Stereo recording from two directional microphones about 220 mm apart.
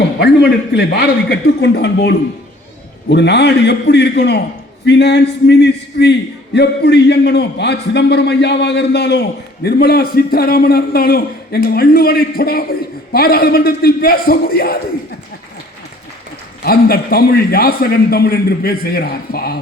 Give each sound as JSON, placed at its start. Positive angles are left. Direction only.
{"t": 0.2, "sound": "a man's voice", "side_deg": 50}
{"t": 16.6, "sound": "a man's voice", "side_deg": 45}